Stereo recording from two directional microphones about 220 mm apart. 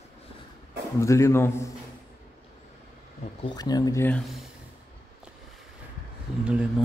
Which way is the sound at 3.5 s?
15° left (ahead or behind).